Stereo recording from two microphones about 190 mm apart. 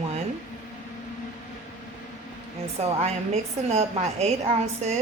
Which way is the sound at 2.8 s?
35° right (ahead or behind).